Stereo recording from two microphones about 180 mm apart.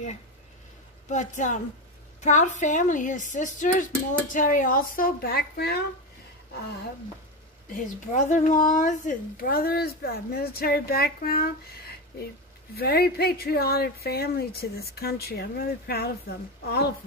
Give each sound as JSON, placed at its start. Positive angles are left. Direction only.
{"t": 1.0, "sound": "a woman's voice", "side_deg": 45}
{"t": 7.7, "sound": "speech", "side_deg": 45}